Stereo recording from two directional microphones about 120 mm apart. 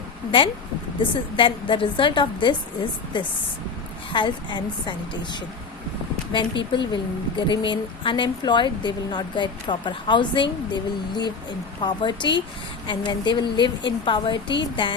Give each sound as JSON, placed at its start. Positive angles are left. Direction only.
{"t": 0.3, "sound": "a woman's voice", "side_deg": 45}